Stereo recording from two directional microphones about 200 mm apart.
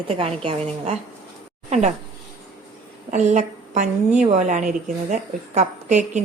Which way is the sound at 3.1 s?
35° right (ahead or behind).